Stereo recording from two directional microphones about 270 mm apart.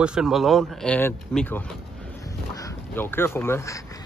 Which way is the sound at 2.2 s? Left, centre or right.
Centre.